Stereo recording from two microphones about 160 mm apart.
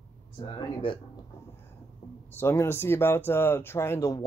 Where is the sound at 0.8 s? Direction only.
35° left (ahead or behind).